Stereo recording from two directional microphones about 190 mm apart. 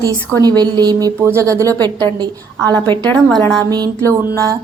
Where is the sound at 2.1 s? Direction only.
20° right (ahead or behind).